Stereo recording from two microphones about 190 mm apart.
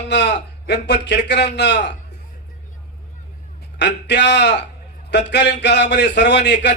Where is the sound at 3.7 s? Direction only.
65° left (ahead or behind).